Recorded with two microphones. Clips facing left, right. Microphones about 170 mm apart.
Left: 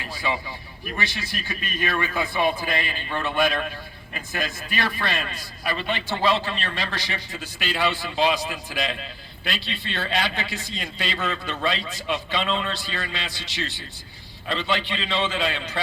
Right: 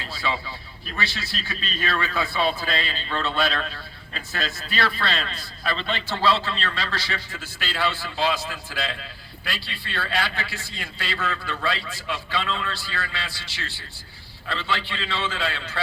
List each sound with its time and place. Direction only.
0.0 s a man's voice: 15° left (ahead or behind)